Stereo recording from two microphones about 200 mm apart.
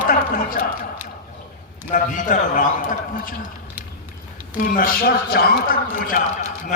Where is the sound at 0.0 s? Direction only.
45° left (ahead or behind).